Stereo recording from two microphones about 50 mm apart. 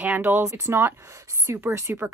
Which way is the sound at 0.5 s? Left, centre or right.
Right.